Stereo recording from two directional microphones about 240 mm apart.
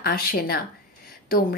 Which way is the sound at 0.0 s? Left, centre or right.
Left.